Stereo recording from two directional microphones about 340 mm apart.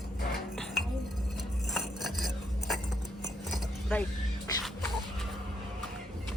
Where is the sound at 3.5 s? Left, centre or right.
Centre.